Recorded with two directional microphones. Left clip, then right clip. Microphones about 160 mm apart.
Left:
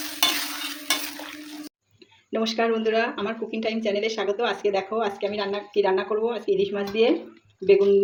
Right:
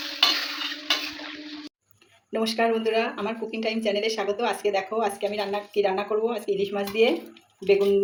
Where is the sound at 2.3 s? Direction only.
35° left (ahead or behind).